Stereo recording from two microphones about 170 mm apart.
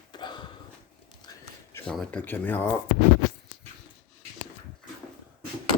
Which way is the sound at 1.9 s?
5° left (ahead or behind).